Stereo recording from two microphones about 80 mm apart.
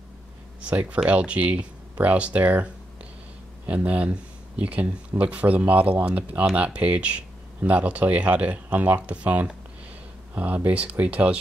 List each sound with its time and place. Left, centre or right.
0.6 s speech: centre